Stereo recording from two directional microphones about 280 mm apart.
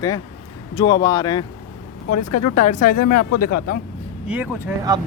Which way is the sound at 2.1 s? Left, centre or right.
Left.